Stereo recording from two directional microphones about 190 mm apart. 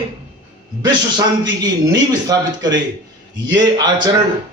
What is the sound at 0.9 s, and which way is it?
Speech, 20° right (ahead or behind).